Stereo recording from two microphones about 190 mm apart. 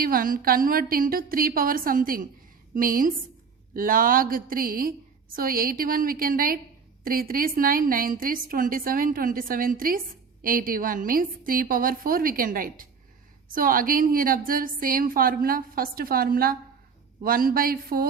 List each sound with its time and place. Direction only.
0.0 s a woman's voice: 50° right (ahead or behind)